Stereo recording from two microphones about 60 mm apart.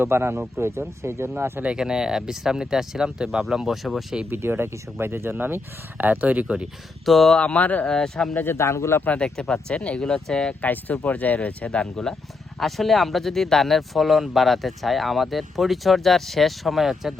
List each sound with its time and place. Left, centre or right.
0.0 s speech: right
1.6 s speech: centre
4.3 s speech: right
7.0 s speech: centre
7.3 s speech: left
7.9 s speech: centre
8.5 s a man's voice: left
9.1 s speech: centre
10.6 s speech: left
12.5 s speech: centre